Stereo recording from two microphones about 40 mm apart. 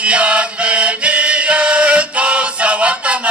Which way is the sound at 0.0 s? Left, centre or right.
Right.